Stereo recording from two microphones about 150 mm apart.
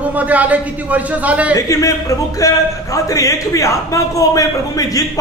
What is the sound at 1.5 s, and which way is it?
Speech, 20° left (ahead or behind).